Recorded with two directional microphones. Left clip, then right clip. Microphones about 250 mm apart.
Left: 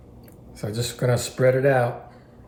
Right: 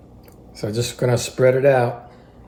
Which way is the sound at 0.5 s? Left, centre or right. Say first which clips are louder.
Right 5 dB; right.